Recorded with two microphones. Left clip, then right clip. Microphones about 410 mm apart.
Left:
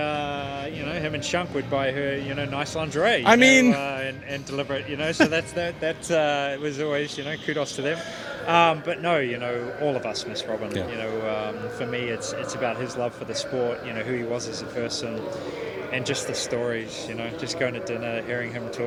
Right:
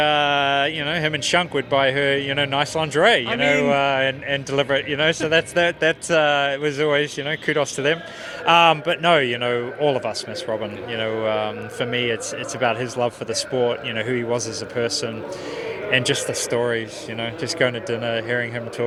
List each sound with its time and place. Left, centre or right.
0.0 s speech: right
3.2 s speech: left
3.7 s a man's voice: right